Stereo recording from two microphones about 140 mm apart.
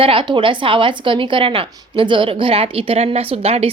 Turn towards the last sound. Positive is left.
turn(degrees=-45)  # may be behind; listen again after turning